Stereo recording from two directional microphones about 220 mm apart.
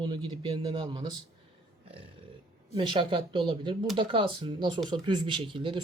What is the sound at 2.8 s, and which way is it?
Speech, 25° right (ahead or behind).